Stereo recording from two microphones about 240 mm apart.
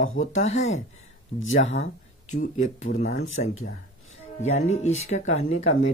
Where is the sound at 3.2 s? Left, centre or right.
Left.